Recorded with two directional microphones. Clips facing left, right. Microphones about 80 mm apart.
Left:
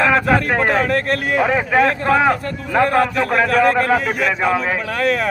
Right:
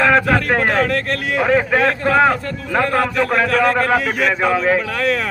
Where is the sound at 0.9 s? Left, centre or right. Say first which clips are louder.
Left 2 dB; left.